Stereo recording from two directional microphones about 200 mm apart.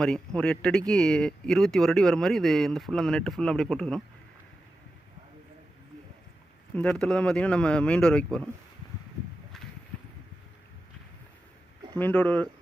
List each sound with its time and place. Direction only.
0.0 s speech: 5° left (ahead or behind)
6.7 s speech: 5° left (ahead or behind)
11.9 s speech: 5° left (ahead or behind)